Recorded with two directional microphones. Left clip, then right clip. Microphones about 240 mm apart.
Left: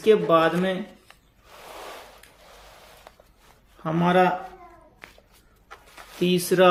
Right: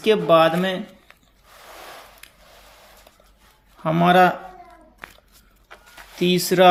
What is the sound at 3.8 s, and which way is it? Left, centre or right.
Speech, right.